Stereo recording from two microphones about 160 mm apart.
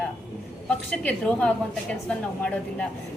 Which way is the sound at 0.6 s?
5° left (ahead or behind).